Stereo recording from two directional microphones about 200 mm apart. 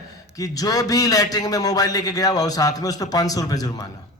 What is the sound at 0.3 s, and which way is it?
A man's voice, 15° left (ahead or behind).